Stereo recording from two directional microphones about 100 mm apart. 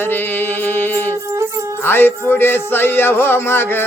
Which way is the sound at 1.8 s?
20° left (ahead or behind).